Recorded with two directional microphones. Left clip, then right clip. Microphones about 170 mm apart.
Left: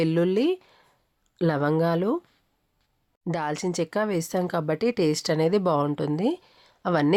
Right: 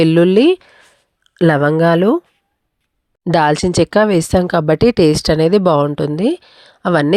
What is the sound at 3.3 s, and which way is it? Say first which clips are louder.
Speech: right 15 dB; 55° right (ahead or behind).